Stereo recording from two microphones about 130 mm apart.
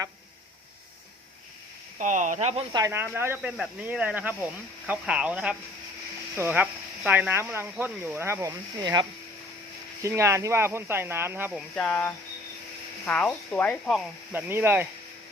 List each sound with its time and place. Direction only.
2.0 s speech: 75° right (ahead or behind); by 2.6 s 60° right (ahead or behind)
2.9 s speech: 15° right (ahead or behind)
8.8 s speech: 30° right (ahead or behind)
10.0 s speech: 20° right (ahead or behind)
11.7 s speech: 10° left (ahead or behind)
14.3 s speech: 15° right (ahead or behind)